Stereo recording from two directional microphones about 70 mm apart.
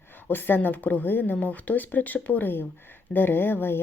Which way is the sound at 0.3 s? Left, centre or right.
Left.